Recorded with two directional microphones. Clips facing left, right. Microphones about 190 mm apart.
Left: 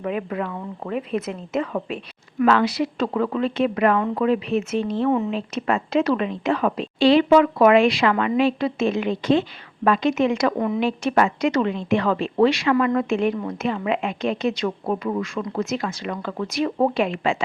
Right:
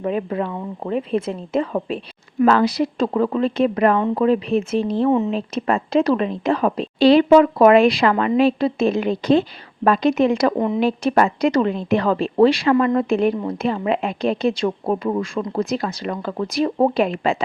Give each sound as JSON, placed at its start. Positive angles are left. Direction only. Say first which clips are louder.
{"t": 0.0, "sound": "a woman's voice", "louder": "right 3 dB", "side_deg": -30}
{"t": 5.0, "sound": "a woman's voice", "louder": "right 3 dB", "side_deg": -20}
{"t": 5.3, "sound": "a woman's voice", "louder": "right 2 dB", "side_deg": -35}